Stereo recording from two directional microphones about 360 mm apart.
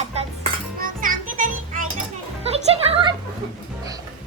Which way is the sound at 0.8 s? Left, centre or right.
Right.